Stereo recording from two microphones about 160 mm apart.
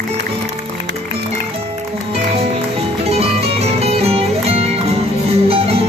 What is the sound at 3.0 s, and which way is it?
Music, 40° right (ahead or behind).